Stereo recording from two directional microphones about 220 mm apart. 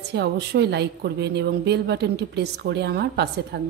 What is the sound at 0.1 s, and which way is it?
Speech, 50° right (ahead or behind).